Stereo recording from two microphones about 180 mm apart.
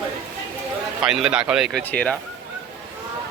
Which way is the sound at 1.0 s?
5° right (ahead or behind).